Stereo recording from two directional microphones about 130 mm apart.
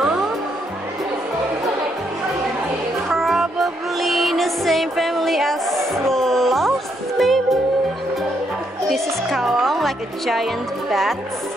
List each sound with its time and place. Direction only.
0.0 s music: centre (ahead or behind)
3.1 s music: centre (ahead or behind)
8.8 s music: centre (ahead or behind)